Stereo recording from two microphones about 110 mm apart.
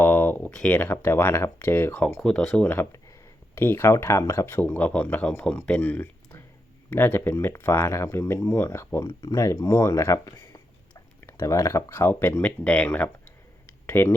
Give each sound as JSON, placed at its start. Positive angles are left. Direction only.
{"t": 0.0, "sound": "speech", "side_deg": 15}
{"t": 3.5, "sound": "speech", "side_deg": 20}